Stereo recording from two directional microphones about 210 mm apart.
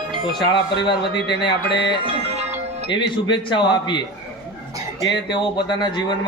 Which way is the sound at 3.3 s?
20° left (ahead or behind).